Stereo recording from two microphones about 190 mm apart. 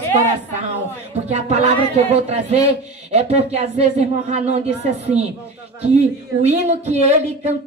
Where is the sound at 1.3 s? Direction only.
35° right (ahead or behind).